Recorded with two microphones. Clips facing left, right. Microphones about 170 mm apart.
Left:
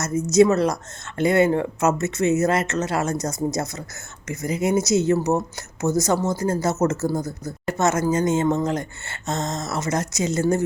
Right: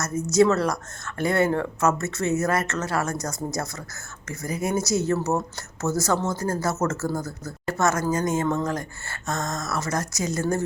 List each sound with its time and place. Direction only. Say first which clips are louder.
0.0 s speech: left 3 dB; 20° left (ahead or behind)